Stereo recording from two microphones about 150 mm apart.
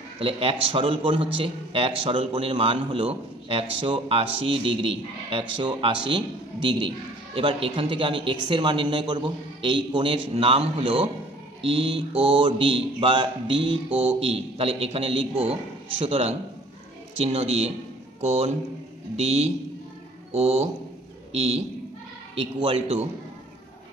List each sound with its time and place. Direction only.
0.2 s a man's voice: 40° right (ahead or behind)